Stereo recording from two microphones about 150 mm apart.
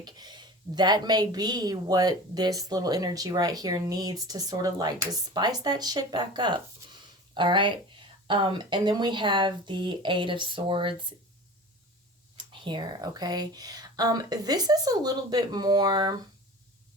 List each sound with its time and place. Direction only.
0.0 s speech: 30° right (ahead or behind)
12.5 s speech: 30° right (ahead or behind)